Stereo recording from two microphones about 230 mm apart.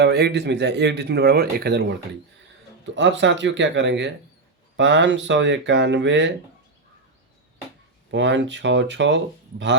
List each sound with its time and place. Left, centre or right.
0.0 s speech: right
2.9 s speech: right
8.1 s speech: right